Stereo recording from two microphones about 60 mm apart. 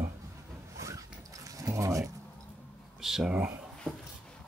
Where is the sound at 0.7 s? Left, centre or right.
Right.